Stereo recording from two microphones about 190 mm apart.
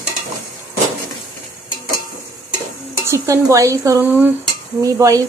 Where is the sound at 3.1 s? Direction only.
15° right (ahead or behind).